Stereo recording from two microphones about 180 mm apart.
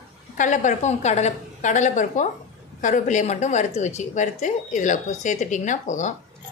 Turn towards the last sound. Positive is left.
turn(degrees=45)  # may be behind; listen again after turning